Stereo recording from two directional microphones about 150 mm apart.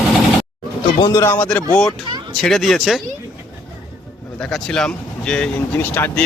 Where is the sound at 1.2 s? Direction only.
10° left (ahead or behind).